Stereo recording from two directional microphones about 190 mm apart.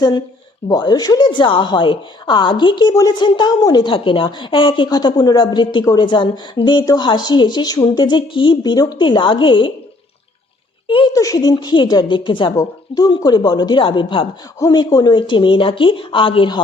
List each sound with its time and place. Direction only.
0.7 s a woman's voice: 20° left (ahead or behind)
10.8 s a woman's voice: 25° left (ahead or behind)